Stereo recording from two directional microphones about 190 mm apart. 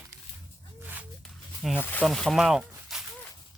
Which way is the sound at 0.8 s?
10° right (ahead or behind).